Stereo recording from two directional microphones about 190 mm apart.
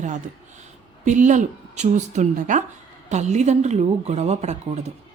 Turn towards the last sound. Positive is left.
turn(degrees=-35)  # may be behind; listen again after turning